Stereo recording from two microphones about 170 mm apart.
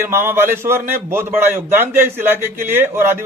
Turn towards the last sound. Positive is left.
turn(degrees=-15)  # may be behind; listen again after turning